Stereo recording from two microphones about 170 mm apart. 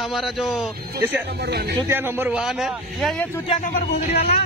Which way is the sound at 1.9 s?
15° right (ahead or behind).